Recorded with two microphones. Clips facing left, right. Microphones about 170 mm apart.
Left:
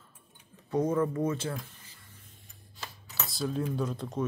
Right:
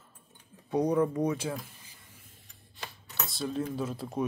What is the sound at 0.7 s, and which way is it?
Speech, 15° right (ahead or behind).